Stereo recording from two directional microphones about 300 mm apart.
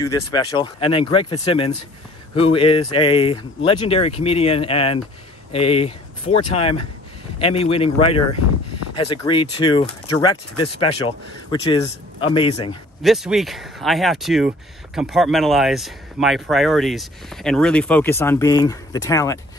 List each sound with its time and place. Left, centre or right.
0.0 s speech: centre
13.0 s speech: centre